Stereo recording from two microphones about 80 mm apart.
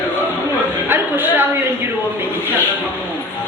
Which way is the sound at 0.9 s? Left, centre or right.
Right.